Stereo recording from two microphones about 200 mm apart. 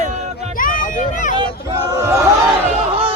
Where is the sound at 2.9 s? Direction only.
30° right (ahead or behind).